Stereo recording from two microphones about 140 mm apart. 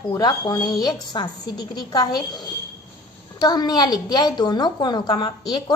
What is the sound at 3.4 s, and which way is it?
A woman's voice, 30° left (ahead or behind).